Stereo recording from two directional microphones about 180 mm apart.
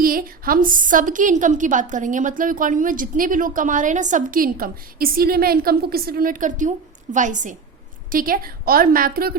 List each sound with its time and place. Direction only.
0.0 s a woman's voice: 55° right (ahead or behind)